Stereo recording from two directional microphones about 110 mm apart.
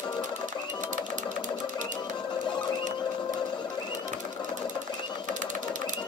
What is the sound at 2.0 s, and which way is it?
Music, 45° left (ahead or behind).